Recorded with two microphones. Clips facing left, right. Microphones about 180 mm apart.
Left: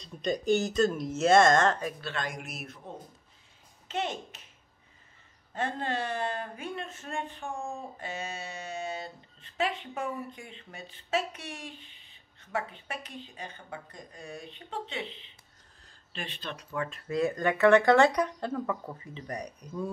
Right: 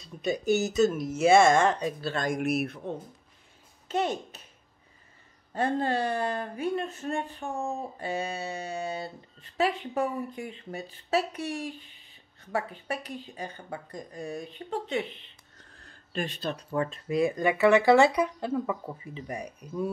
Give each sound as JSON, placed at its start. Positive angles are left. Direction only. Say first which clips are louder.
{"t": 0.0, "sound": "speech", "louder": "right 1 dB", "side_deg": -5}
{"t": 1.9, "sound": "speech", "louder": "right 6 dB", "side_deg": -35}
{"t": 2.4, "sound": "speech", "louder": "right 15 dB", "side_deg": -65}
{"t": 3.9, "sound": "speech", "louder": "right 5 dB", "side_deg": -40}
{"t": 5.5, "sound": "speech", "louder": "right 5 dB", "side_deg": -35}
{"t": 15.5, "sound": "a sound", "louder": "right 6 dB", "side_deg": -70}
{"t": 17.1, "sound": "speech", "louder": "right 2 dB", "side_deg": -10}